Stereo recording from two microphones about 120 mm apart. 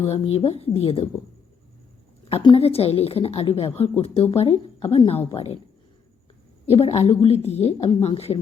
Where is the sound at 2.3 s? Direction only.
50° left (ahead or behind).